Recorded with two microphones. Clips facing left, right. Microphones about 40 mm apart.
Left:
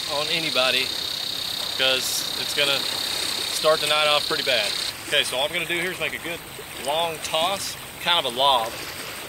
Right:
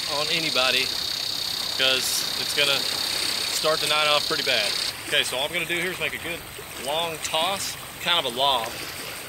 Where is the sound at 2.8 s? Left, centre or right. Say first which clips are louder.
Even; left.